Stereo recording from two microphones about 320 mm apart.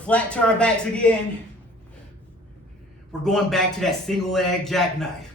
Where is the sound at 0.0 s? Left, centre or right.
Centre.